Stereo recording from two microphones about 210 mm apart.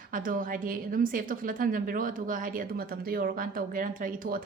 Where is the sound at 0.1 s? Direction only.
40° right (ahead or behind).